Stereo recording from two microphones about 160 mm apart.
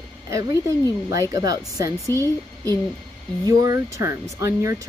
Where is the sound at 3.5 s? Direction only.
20° right (ahead or behind).